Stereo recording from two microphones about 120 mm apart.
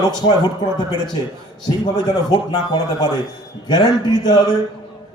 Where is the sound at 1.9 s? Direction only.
35° left (ahead or behind).